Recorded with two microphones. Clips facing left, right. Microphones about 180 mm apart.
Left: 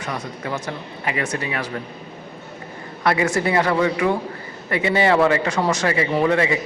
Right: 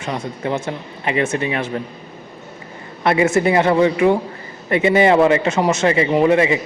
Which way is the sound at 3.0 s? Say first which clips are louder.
Right 4 dB; 25° right (ahead or behind).